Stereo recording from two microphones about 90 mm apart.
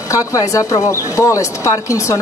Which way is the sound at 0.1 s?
40° left (ahead or behind).